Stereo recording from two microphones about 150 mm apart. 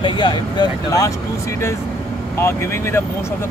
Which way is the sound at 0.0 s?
30° left (ahead or behind).